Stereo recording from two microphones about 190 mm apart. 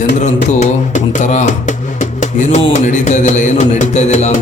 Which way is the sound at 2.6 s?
35° left (ahead or behind).